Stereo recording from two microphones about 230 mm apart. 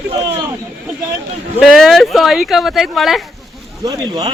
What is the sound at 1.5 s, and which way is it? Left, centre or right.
Speech, centre.